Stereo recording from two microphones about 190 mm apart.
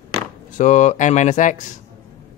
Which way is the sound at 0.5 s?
40° left (ahead or behind).